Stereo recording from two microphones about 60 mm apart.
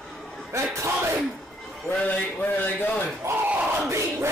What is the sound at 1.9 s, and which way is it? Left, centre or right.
A man's voice, left.